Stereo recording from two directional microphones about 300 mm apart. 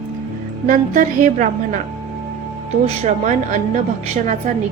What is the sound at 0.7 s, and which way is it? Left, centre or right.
A woman's voice, right.